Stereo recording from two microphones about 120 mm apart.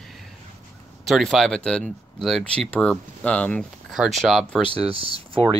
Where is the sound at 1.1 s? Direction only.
Centre (ahead or behind).